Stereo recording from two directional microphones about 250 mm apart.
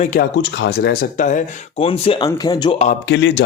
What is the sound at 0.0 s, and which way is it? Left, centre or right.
Speech, left.